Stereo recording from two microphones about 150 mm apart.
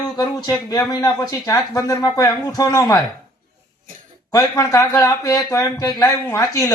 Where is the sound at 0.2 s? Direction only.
25° left (ahead or behind).